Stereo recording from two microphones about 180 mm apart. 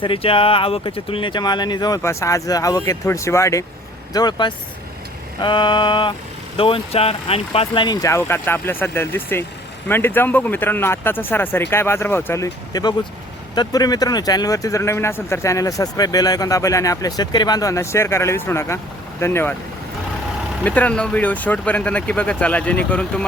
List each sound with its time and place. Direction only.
0.0 s speech: 30° left (ahead or behind); by 19.5 s 15° left (ahead or behind)
20.7 s speech: 10° left (ahead or behind)